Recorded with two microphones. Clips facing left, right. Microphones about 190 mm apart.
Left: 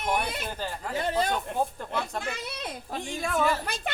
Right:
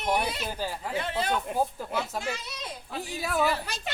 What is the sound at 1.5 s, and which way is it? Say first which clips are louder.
Speech: right 1 dB; 5° right (ahead or behind).